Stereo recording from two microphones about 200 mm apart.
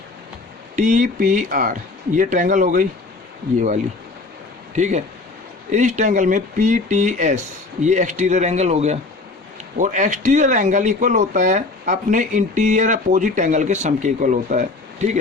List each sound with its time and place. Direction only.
0.8 s speech: 40° right (ahead or behind)
4.7 s speech: 35° right (ahead or behind)